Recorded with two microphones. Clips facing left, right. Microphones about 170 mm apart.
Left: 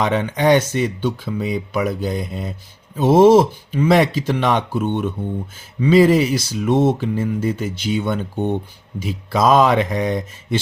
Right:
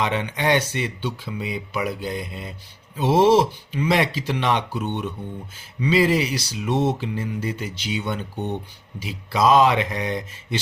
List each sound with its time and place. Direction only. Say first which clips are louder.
0.0 s speech: left 6 dB; 45° left (ahead or behind)